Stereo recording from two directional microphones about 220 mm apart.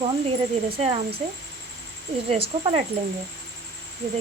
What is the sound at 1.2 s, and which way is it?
Speech, 35° right (ahead or behind).